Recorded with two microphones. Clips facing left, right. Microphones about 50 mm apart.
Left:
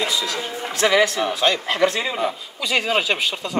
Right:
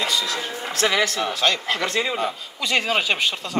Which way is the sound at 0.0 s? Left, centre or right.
Centre.